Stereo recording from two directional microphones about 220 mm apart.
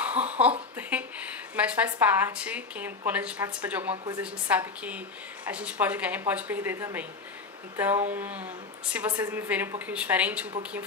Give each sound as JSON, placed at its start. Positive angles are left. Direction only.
{"t": 0.0, "sound": "a sound", "side_deg": -5}
{"t": 0.4, "sound": "a woman's voice", "side_deg": -5}
{"t": 3.9, "sound": "a woman's voice", "side_deg": -20}
{"t": 4.2, "sound": "a woman's voice", "side_deg": -5}